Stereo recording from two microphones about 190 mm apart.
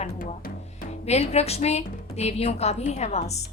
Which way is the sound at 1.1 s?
35° left (ahead or behind).